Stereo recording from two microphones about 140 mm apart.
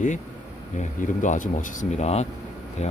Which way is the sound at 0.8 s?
65° left (ahead or behind).